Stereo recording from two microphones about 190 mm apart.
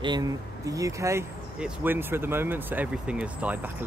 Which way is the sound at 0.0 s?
20° right (ahead or behind).